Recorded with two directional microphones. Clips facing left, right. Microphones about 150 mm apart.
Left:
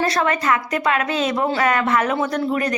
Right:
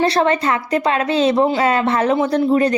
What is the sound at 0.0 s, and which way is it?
Speech, 30° right (ahead or behind).